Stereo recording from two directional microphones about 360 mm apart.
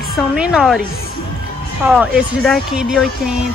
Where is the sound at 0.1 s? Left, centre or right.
Centre.